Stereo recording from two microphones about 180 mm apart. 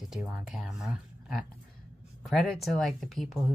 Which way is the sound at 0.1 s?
5° right (ahead or behind).